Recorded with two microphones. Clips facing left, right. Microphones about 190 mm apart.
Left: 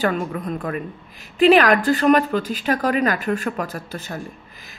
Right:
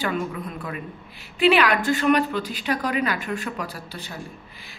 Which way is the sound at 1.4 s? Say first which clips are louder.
Left 5 dB; 40° left (ahead or behind).